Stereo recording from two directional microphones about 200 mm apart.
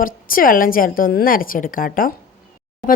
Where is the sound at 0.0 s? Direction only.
45° left (ahead or behind).